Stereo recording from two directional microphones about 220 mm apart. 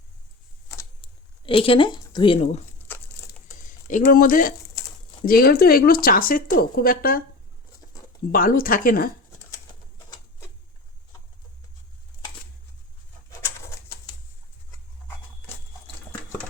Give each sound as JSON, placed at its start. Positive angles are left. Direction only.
{"t": 1.0, "sound": "speech", "side_deg": 25}
{"t": 2.8, "sound": "a sound", "side_deg": 10}
{"t": 3.7, "sound": "speech", "side_deg": 35}
{"t": 8.3, "sound": "speech", "side_deg": 40}